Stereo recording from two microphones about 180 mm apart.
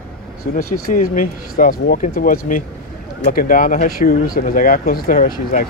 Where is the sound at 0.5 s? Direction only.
50° left (ahead or behind).